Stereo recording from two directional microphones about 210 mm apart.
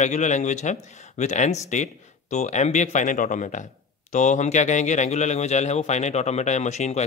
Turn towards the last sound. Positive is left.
turn(degrees=35)  # may be behind; listen again after turning